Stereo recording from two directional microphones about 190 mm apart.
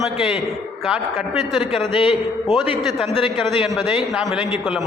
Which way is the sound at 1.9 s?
25° left (ahead or behind).